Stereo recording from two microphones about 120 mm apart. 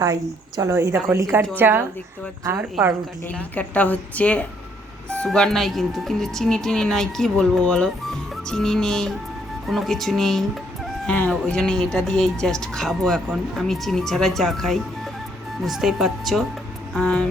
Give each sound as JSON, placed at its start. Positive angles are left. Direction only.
{"t": 0.0, "sound": "a woman's voice", "side_deg": -30}
{"t": 0.9, "sound": "a woman's voice", "side_deg": -10}
{"t": 3.3, "sound": "a woman's voice", "side_deg": 10}